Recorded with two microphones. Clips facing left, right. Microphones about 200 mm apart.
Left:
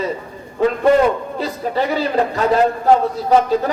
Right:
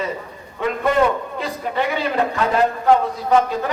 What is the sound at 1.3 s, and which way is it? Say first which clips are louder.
Speech: left 3 dB; 35° left (ahead or behind).